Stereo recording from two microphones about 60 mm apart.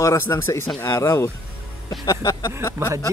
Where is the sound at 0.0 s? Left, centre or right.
Left.